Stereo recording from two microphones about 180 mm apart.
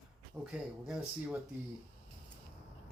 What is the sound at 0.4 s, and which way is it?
Speech, 5° right (ahead or behind).